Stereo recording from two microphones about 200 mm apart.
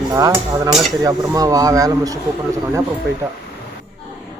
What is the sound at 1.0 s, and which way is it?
Speech, 15° right (ahead or behind).